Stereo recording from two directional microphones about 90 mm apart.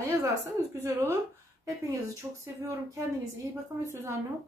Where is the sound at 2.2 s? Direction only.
20° right (ahead or behind).